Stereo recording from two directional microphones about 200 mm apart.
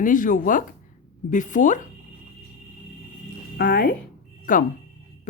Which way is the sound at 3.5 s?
50° left (ahead or behind).